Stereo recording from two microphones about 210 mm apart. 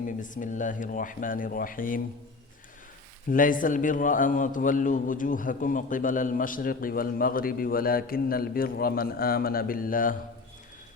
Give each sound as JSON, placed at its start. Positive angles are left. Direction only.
{"t": 0.0, "sound": "a man's voice", "side_deg": 40}
{"t": 3.2, "sound": "a man's voice", "side_deg": 40}